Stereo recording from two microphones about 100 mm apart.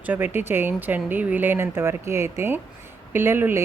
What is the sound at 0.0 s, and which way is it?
A woman's voice, 20° right (ahead or behind).